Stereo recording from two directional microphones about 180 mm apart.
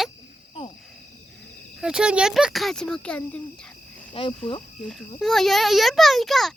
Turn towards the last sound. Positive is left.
turn(degrees=0)  # may be behind; listen again after turning